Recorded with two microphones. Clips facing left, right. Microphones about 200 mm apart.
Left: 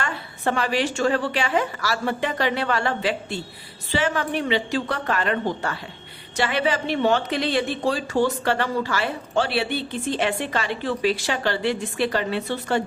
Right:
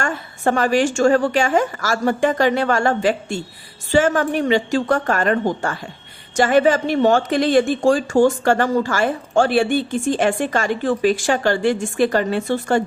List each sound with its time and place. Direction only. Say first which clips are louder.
0.0 s speech: right 5 dB; 45° right (ahead or behind)